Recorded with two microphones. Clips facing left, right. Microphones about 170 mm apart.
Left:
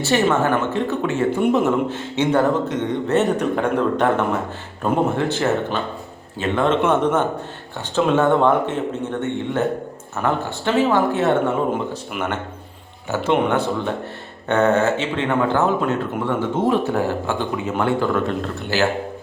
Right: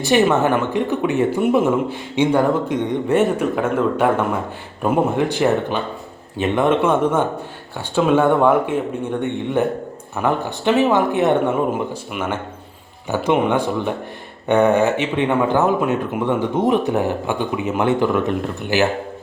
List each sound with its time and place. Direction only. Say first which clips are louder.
0.0 s speech: right 2 dB; 15° right (ahead or behind)